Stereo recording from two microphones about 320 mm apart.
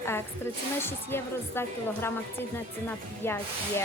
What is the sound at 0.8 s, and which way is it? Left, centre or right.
Speech, centre.